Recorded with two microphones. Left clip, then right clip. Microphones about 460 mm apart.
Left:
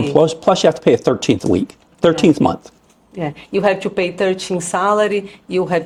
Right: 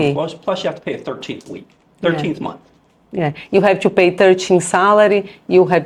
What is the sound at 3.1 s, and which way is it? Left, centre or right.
A woman's voice, right.